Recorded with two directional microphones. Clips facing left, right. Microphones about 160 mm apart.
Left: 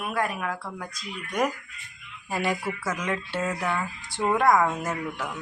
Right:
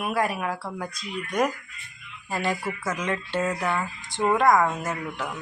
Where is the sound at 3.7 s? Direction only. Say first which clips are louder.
Right 1 dB; 10° right (ahead or behind).